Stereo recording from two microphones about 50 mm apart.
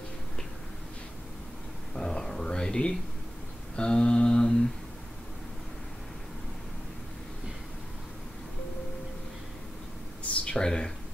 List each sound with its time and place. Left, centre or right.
2.0 s a sound: centre
3.7 s mantra: centre
10.4 s speech: centre